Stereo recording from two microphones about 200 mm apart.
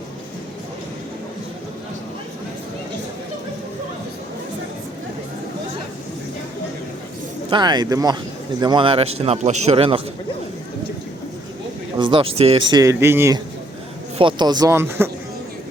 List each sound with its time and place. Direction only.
7.5 s a man's voice: 20° right (ahead or behind)
11.9 s speech: 25° right (ahead or behind)
12.7 s speech: 15° right (ahead or behind)